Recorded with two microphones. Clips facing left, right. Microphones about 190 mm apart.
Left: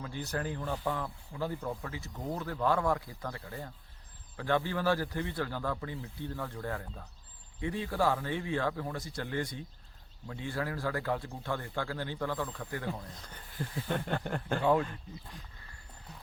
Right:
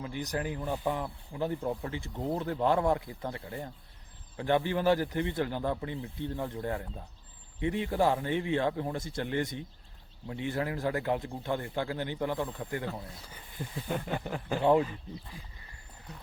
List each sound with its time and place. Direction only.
0.0 s speech: 15° right (ahead or behind)
13.0 s speech: 10° right (ahead or behind)
14.6 s speech: 20° right (ahead or behind)
14.8 s speech: 5° right (ahead or behind)